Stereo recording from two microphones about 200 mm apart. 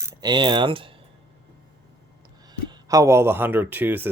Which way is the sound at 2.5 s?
20° right (ahead or behind).